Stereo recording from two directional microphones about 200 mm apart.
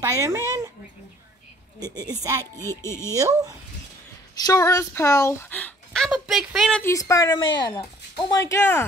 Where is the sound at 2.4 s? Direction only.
15° left (ahead or behind).